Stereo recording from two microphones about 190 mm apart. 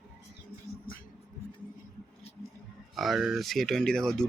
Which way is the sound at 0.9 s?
50° left (ahead or behind).